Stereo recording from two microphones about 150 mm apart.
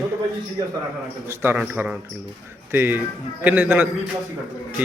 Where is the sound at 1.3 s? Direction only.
15° right (ahead or behind).